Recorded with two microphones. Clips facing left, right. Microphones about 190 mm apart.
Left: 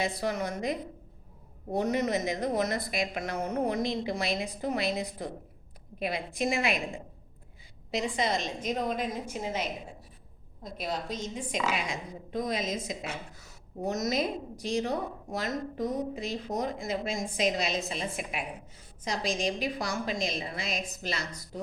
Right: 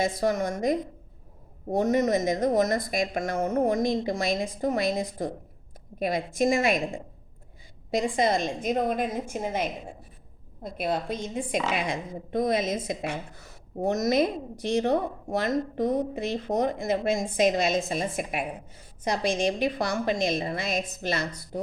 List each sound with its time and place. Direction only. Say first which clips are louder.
0.0 s a woman's voice: right 5 dB; 45° right (ahead or behind)